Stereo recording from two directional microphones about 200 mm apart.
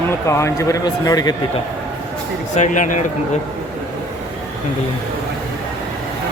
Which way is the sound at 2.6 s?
40° left (ahead or behind).